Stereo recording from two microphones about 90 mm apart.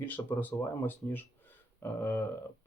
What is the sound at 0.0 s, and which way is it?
Speech, 20° left (ahead or behind).